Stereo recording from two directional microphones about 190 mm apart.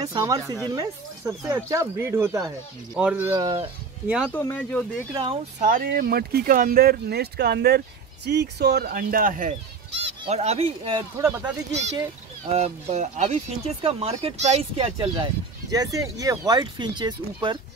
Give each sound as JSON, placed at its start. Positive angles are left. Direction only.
{"t": 0.0, "sound": "speech", "side_deg": -20}
{"t": 4.2, "sound": "speech", "side_deg": 10}
{"t": 5.1, "sound": "speech", "side_deg": -30}
{"t": 5.7, "sound": "speech", "side_deg": -50}
{"t": 10.2, "sound": "speech", "side_deg": -35}
{"t": 11.0, "sound": "speech", "side_deg": -15}
{"t": 12.4, "sound": "speech", "side_deg": -35}